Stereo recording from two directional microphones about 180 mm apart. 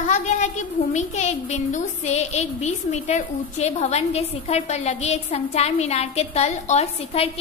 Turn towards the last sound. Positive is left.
turn(degrees=35)  # may be behind; listen again after turning